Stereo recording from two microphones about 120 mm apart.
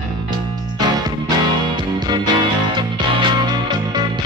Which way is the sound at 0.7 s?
35° right (ahead or behind).